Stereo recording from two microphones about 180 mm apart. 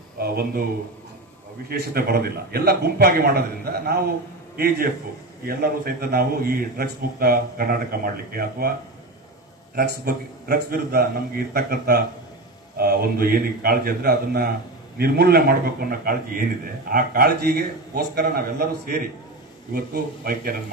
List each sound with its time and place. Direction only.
0.2 s a man's voice: 55° right (ahead or behind)
1.7 s a man's voice: 55° right (ahead or behind)
9.7 s a man's voice: 55° right (ahead or behind)